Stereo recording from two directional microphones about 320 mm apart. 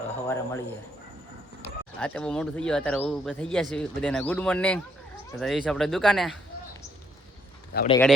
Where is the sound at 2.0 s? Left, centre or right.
Centre.